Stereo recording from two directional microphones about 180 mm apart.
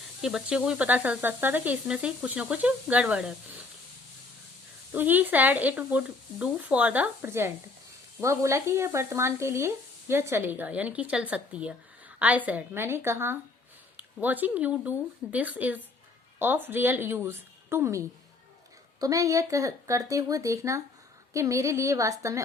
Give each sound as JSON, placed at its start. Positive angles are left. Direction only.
{"t": 0.2, "sound": "speech", "side_deg": -5}
{"t": 4.9, "sound": "speech", "side_deg": -10}